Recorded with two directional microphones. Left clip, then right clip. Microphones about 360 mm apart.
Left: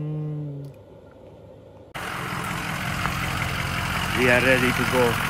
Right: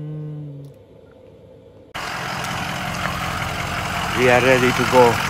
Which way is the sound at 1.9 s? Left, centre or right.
Right.